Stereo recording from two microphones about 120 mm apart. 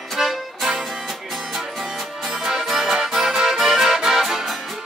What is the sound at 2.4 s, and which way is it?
Accordion, centre (ahead or behind).